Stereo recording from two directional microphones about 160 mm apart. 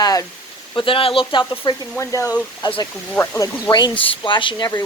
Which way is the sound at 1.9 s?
15° left (ahead or behind).